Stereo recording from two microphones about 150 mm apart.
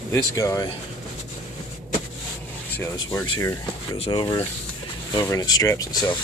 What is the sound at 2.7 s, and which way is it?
Speech, 15° left (ahead or behind).